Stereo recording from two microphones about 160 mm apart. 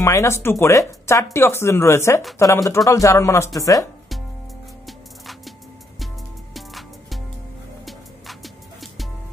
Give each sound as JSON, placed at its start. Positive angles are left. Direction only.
{"t": 0.0, "sound": "speech", "side_deg": 20}
{"t": 4.8, "sound": "music", "side_deg": 0}
{"t": 6.5, "sound": "music", "side_deg": 0}